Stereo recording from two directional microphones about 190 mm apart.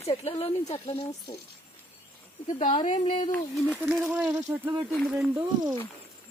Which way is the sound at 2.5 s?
40° left (ahead or behind).